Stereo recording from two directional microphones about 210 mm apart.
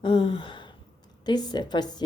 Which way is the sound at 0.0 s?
25° left (ahead or behind).